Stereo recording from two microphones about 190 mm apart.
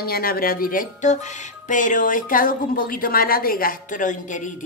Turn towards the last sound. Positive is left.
turn(degrees=40)  # may be behind; listen again after turning